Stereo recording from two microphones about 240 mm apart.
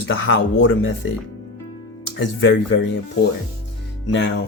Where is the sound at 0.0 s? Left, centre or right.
Left.